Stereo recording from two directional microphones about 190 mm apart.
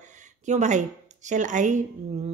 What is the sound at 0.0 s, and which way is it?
Speech, 40° right (ahead or behind).